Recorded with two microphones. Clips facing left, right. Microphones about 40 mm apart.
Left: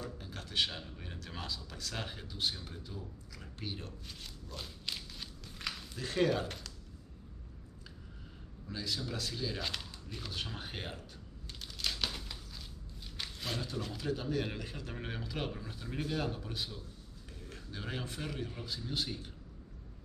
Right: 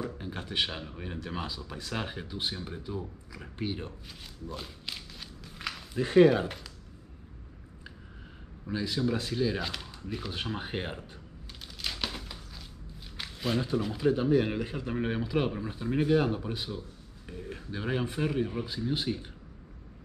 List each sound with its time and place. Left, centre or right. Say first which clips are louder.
0.0 s speech: right 8 dB; right
4.6 s walk: left 3 dB; centre
5.9 s speech: right 11 dB; right
8.6 s speech: right 9 dB; right
9.6 s speech: right 4 dB; centre
11.6 s crumpling: right 2 dB; centre
13.2 s speech: right 8 dB; centre